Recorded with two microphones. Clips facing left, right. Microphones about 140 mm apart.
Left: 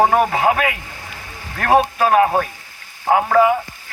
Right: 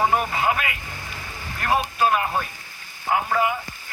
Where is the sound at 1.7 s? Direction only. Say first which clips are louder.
Left 8 dB; 55° left (ahead or behind).